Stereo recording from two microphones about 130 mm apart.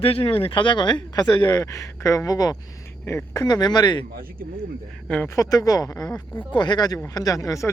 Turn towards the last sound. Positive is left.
turn(degrees=25)  # may be behind; listen again after turning